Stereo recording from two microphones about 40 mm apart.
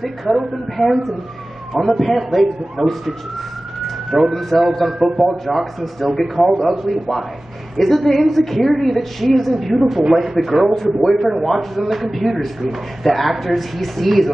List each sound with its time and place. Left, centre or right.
0.0 s a man's voice: centre